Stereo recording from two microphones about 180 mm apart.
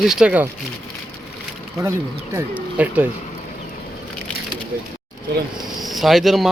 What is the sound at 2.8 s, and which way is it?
Speech, 10° right (ahead or behind).